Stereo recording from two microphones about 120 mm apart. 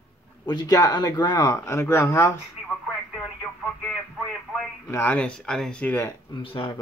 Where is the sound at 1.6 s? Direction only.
20° left (ahead or behind).